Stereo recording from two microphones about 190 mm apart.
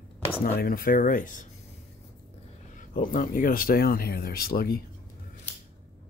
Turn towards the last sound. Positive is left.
turn(degrees=50)  # may be behind; listen again after turning